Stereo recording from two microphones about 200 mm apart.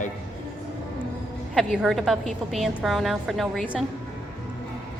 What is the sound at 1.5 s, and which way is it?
A woman's voice, centre (ahead or behind).